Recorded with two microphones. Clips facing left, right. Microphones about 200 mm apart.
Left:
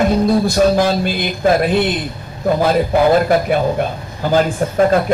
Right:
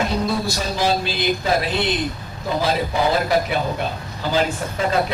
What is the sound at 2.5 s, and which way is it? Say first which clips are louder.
A man's voice: left 7 dB; 50° left (ahead or behind).